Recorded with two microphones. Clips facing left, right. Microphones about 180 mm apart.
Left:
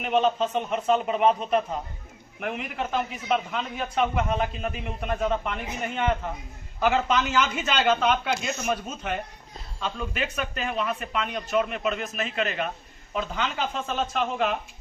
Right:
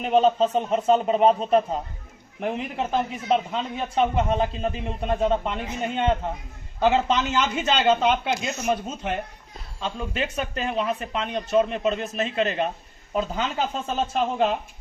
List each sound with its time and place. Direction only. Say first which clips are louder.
0.0 s a man's voice: right 4 dB; 35° right (ahead or behind)